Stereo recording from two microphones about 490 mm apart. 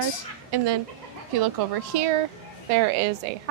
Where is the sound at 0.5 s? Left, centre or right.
Right.